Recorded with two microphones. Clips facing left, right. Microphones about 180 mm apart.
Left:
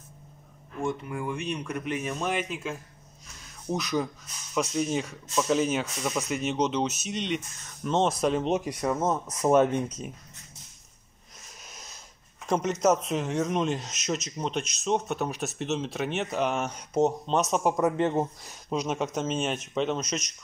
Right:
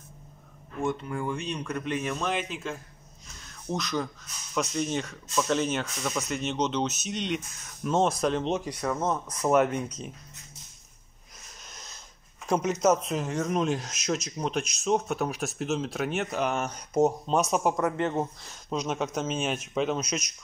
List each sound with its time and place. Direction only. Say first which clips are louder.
1.0 s speech: even; 10° left (ahead or behind)
8.5 s speech: left 2 dB; 20° left (ahead or behind)
11.6 s wheeze: even; 5° left (ahead or behind)
12.4 s speech: even; centre (ahead or behind)
17.7 s speech: left 2 dB; 10° left (ahead or behind)